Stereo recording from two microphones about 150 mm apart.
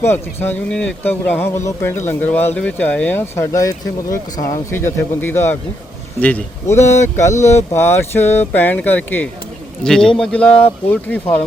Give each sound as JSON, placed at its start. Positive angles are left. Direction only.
{"t": 0.0, "sound": "speech", "side_deg": 15}